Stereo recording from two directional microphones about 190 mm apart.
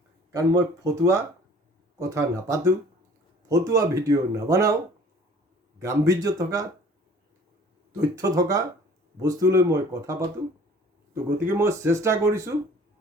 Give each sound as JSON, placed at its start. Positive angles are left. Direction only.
{"t": 0.3, "sound": "speech", "side_deg": -15}
{"t": 5.8, "sound": "speech", "side_deg": -15}
{"t": 8.1, "sound": "speech", "side_deg": -20}
{"t": 11.4, "sound": "speech", "side_deg": -15}